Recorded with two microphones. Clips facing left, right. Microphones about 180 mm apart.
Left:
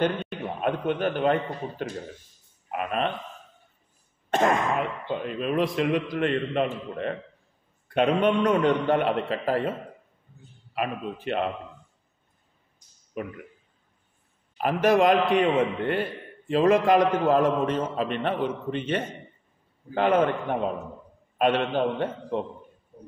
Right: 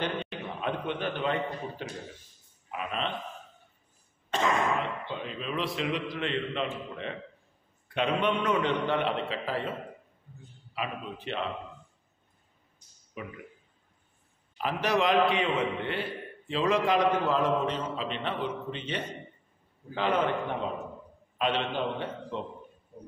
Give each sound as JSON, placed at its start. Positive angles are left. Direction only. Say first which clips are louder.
{"t": 0.6, "sound": "a man's voice", "louder": "left 6 dB", "side_deg": 50}
{"t": 2.7, "sound": "a sound", "louder": "left 6 dB", "side_deg": 55}
{"t": 4.3, "sound": "cough", "louder": "left 6 dB", "side_deg": 50}
{"t": 5.0, "sound": "a man's voice", "louder": "left 7 dB", "side_deg": 55}
{"t": 10.7, "sound": "a man's voice", "louder": "left 6 dB", "side_deg": 50}
{"t": 13.2, "sound": "a man's voice", "louder": "left 7 dB", "side_deg": 50}
{"t": 14.6, "sound": "a man's voice", "louder": "left 7 dB", "side_deg": 50}